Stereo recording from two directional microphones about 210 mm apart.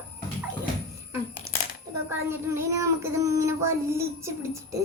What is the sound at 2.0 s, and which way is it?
Child singing, 15° right (ahead or behind).